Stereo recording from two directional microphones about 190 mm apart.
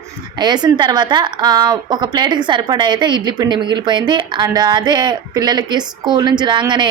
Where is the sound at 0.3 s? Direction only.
20° right (ahead or behind).